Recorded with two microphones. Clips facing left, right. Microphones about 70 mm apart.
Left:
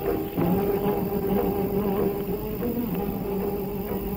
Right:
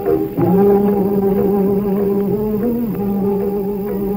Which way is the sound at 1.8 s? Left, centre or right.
Centre.